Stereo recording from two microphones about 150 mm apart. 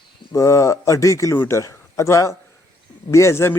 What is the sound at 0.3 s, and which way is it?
A man's voice, 20° left (ahead or behind).